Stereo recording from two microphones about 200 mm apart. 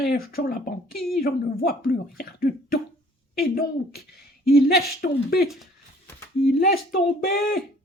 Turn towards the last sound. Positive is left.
turn(degrees=50)  # may be behind; listen again after turning